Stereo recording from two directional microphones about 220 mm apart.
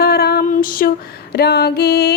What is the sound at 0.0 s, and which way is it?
Female singing, 45° left (ahead or behind).